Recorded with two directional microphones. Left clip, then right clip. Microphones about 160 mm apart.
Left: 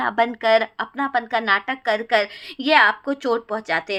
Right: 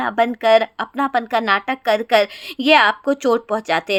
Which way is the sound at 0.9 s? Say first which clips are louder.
Right 3 dB; 35° right (ahead or behind).